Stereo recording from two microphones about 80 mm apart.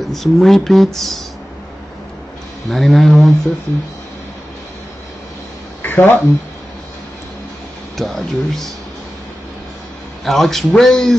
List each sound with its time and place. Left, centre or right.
0.0 s speech: centre
2.7 s speech: centre
5.8 s a sound: left
8.0 s speech: centre
10.2 s speech: centre